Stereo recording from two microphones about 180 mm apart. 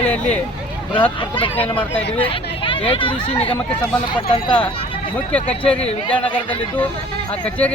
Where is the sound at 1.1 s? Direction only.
30° left (ahead or behind).